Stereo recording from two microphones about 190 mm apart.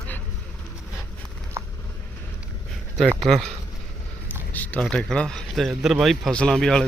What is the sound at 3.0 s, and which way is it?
Speech, centre (ahead or behind).